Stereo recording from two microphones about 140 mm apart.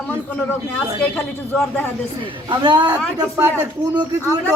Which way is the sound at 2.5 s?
35° right (ahead or behind).